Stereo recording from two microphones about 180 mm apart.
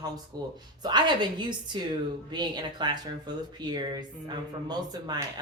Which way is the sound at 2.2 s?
25° right (ahead or behind).